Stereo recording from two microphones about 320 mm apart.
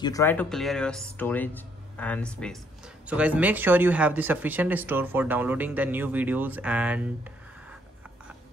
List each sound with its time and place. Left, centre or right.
0.0 s speech: centre